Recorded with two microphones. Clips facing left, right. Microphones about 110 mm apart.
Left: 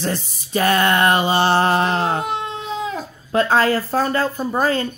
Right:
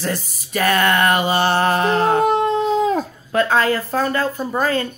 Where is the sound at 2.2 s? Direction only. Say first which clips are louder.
Right 8 dB; 40° right (ahead or behind).